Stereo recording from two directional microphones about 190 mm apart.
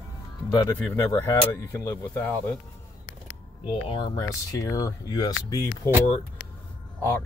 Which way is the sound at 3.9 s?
20° left (ahead or behind).